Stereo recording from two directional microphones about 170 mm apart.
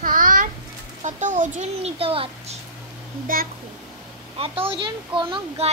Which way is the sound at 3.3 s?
55° right (ahead or behind).